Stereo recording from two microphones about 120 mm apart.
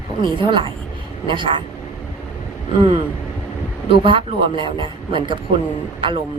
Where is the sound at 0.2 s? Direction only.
40° right (ahead or behind).